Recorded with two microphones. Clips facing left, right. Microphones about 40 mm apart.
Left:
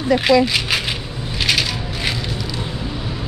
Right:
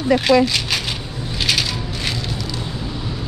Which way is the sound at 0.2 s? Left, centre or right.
Centre.